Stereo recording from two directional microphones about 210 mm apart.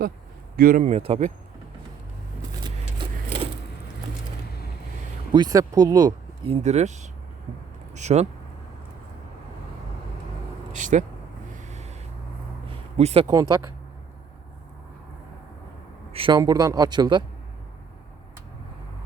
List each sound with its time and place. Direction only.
0.5 s speech: 40° right (ahead or behind)
2.6 s vehicle: 25° right (ahead or behind)
5.3 s speech: 20° right (ahead or behind)
10.7 s vehicle: 35° right (ahead or behind)
11.5 s a sound: 35° right (ahead or behind)
13.0 s speech: 30° right (ahead or behind)
13.2 s speech: 15° right (ahead or behind)
16.1 s speech: 20° right (ahead or behind)